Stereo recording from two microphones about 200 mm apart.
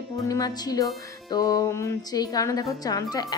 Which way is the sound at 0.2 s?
20° left (ahead or behind).